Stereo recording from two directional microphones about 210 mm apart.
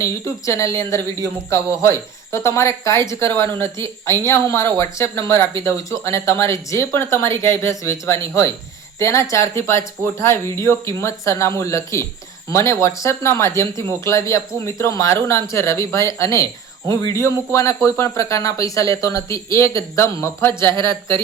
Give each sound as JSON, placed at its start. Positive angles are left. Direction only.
{"t": 0.0, "sound": "speech", "side_deg": 15}